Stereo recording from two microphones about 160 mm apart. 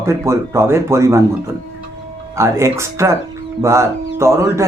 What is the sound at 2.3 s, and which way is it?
Speech, 15° right (ahead or behind).